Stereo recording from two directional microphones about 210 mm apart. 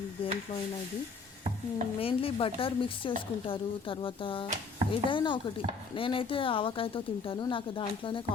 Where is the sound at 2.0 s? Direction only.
25° left (ahead or behind).